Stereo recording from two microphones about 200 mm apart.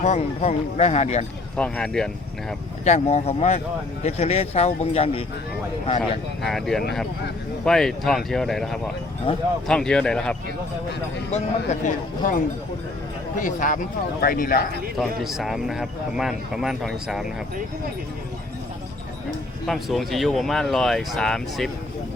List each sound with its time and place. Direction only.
0.0 s speech: 35° left (ahead or behind)
1.5 s speech: 5° left (ahead or behind)
2.8 s speech: 35° left (ahead or behind)
6.0 s speech: centre (ahead or behind)
9.3 s speech: 25° left (ahead or behind)
9.6 s speech: 5° left (ahead or behind)
11.3 s speech: 35° left (ahead or behind)
15.2 s speech: centre (ahead or behind)
19.6 s speech: centre (ahead or behind)